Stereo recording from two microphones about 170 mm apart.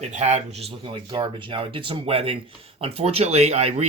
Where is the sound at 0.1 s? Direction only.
45° right (ahead or behind).